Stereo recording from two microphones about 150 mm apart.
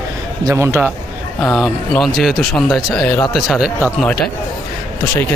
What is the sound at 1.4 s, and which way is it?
A man's voice, centre (ahead or behind).